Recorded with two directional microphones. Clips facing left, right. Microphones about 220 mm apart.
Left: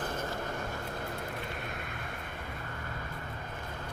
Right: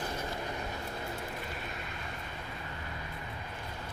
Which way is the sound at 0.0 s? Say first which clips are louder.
Left 1 dB; 50° left (ahead or behind).